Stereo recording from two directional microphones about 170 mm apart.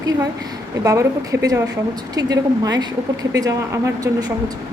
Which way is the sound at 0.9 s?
20° right (ahead or behind).